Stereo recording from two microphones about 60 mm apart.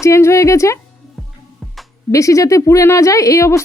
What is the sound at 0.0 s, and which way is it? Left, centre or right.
Speech, left.